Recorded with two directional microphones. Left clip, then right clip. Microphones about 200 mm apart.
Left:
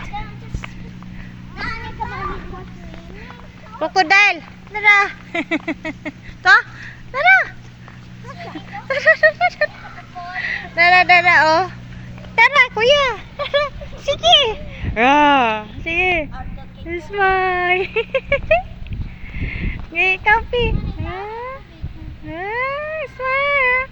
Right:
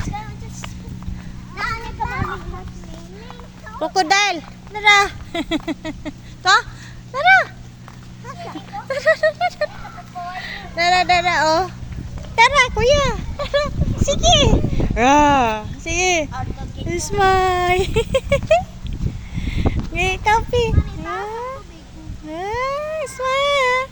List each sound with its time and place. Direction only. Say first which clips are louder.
3.8 s speech: left 3 dB; 20° right (ahead or behind)
7.1 s dog: left 1 dB; 15° right (ahead or behind)
8.7 s a sound: left 3 dB; 10° right (ahead or behind)
10.4 s speech: left 5 dB; 15° right (ahead or behind)
19.4 s a sound: right 3 dB; 25° right (ahead or behind)
22.3 s vehicle: even; 25° right (ahead or behind)